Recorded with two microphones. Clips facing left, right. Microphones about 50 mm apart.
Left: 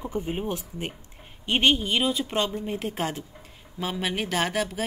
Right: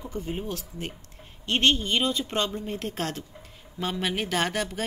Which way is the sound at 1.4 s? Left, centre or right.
Centre.